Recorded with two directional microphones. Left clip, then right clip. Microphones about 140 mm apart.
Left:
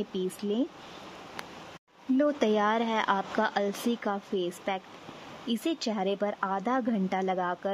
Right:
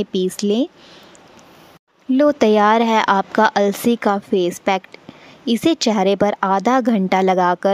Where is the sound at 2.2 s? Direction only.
40° right (ahead or behind).